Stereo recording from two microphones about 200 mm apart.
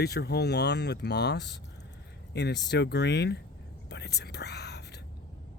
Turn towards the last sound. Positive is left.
turn(degrees=55)  # may be behind; listen again after turning